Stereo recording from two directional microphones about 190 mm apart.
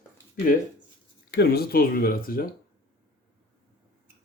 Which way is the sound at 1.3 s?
55° left (ahead or behind).